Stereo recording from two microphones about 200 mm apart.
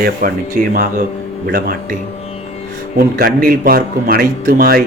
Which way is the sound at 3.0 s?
50° right (ahead or behind).